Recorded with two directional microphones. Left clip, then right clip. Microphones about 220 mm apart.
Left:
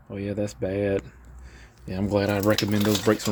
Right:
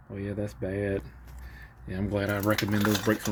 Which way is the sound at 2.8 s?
5° left (ahead or behind).